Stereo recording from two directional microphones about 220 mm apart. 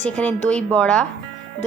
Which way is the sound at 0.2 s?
5° left (ahead or behind).